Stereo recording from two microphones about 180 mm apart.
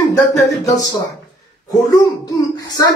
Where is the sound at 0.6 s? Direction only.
20° left (ahead or behind).